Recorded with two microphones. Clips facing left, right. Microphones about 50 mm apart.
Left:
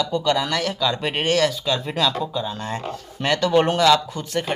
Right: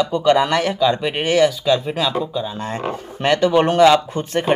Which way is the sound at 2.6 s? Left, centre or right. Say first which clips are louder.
Right 4 dB; right.